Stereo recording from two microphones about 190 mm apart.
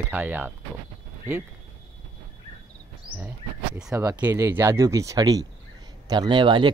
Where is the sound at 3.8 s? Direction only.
5° right (ahead or behind); by 6.7 s 25° right (ahead or behind).